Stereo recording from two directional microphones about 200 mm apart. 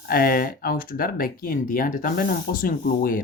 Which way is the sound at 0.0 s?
50° left (ahead or behind).